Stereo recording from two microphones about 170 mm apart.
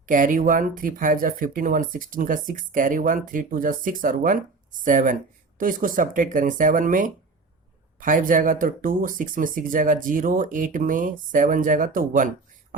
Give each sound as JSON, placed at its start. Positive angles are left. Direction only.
{"t": 0.0, "sound": "speech", "side_deg": -55}